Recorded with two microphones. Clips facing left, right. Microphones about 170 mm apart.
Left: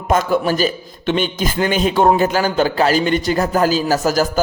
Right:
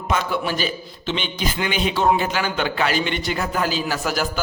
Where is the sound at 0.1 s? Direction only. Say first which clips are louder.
Left 7 dB; 45° left (ahead or behind).